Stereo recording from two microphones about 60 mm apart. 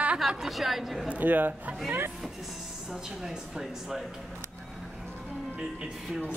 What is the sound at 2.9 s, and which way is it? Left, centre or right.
Speech, centre.